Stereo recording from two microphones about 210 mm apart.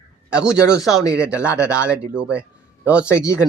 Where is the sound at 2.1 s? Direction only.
5° right (ahead or behind).